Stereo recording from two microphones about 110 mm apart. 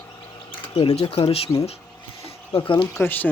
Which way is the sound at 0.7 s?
65° left (ahead or behind).